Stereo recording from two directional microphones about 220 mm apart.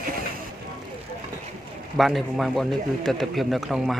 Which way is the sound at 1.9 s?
Centre (ahead or behind).